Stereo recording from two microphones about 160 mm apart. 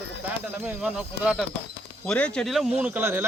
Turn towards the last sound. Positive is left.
turn(degrees=-10)  # may be behind; listen again after turning